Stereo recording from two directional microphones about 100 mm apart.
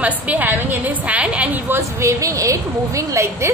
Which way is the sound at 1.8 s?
30° right (ahead or behind).